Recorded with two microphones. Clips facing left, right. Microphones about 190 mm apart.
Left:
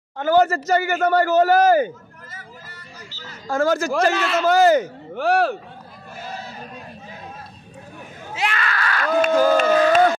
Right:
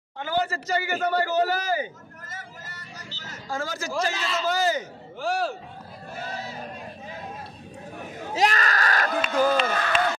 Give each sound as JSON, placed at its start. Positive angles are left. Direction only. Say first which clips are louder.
{"t": 0.2, "sound": "a man's voice", "louder": "left 10 dB", "side_deg": 45}
{"t": 3.4, "sound": "a man's voice", "louder": "left 11 dB", "side_deg": 45}
{"t": 3.7, "sound": "a man's voice", "louder": "left 9 dB", "side_deg": 60}
{"t": 8.3, "sound": "speech", "louder": "right 2 dB", "side_deg": -40}
{"t": 9.2, "sound": "a man's voice", "louder": "left 7 dB", "side_deg": 50}